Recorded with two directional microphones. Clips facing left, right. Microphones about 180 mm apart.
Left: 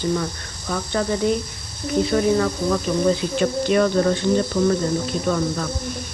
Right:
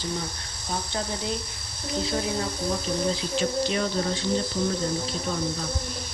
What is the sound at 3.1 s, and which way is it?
Speech, 55° left (ahead or behind).